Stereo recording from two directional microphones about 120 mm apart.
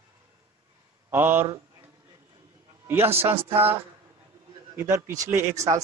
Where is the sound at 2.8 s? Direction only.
20° right (ahead or behind).